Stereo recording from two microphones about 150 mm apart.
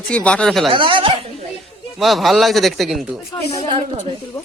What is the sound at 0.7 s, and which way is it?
Speech, 35° right (ahead or behind).